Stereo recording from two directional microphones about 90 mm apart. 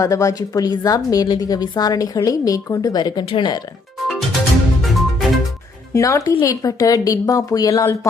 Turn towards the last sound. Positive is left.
turn(degrees=40)  # may be behind; listen again after turning